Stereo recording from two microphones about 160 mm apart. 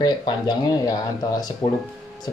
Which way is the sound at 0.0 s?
25° left (ahead or behind).